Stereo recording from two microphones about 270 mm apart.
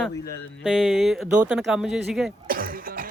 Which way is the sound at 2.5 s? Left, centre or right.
Right.